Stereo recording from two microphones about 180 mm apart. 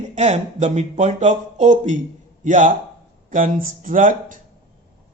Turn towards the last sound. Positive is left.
turn(degrees=-45)  # may be behind; listen again after turning